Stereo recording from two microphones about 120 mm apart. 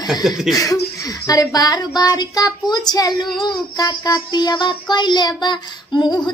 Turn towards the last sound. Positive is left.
turn(degrees=35)  # may be behind; listen again after turning